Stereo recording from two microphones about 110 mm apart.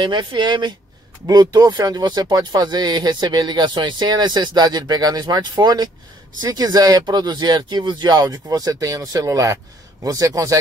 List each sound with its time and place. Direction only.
0.0 s speech: 45° right (ahead or behind)